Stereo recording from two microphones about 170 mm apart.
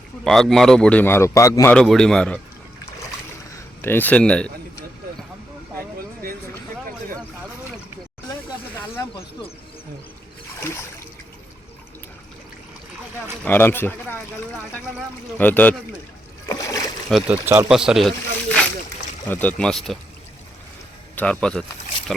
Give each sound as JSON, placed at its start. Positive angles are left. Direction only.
{"t": 0.3, "sound": "a man's voice", "side_deg": 0}
{"t": 1.7, "sound": "a man's voice", "side_deg": 5}
{"t": 3.8, "sound": "a man's voice", "side_deg": 10}
{"t": 13.4, "sound": "a man's voice", "side_deg": 10}
{"t": 15.4, "sound": "a man's voice", "side_deg": 10}
{"t": 16.5, "sound": "splash", "side_deg": 20}
{"t": 17.1, "sound": "a man's voice", "side_deg": 0}
{"t": 17.4, "sound": "speech", "side_deg": -15}
{"t": 17.7, "sound": "a man's voice", "side_deg": -5}
{"t": 19.3, "sound": "a man's voice", "side_deg": 10}
{"t": 21.2, "sound": "a man's voice", "side_deg": 5}